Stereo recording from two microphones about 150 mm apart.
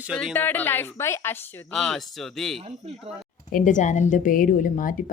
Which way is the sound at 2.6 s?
40° right (ahead or behind).